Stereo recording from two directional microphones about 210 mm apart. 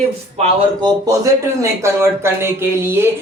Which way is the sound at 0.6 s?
20° right (ahead or behind).